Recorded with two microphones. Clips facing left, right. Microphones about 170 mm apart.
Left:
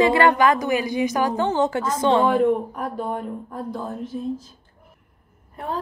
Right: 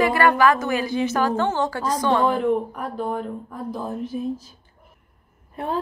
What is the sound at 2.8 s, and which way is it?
Speech, centre (ahead or behind).